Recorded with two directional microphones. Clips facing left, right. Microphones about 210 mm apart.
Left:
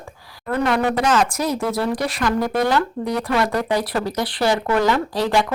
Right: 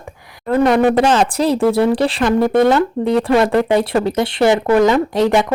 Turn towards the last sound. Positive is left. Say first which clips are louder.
# right 6 dB
turn(degrees=-20)  # may be behind; listen again after turning